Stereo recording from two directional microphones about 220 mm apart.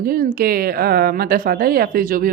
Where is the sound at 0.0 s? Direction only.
40° right (ahead or behind).